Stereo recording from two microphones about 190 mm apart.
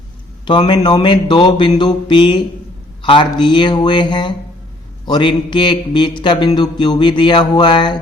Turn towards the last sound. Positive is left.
turn(degrees=25)  # may be behind; listen again after turning